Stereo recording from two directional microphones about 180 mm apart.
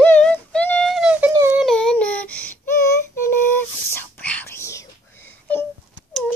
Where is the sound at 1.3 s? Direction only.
15° right (ahead or behind).